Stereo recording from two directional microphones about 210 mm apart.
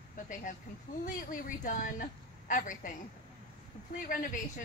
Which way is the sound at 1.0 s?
40° left (ahead or behind).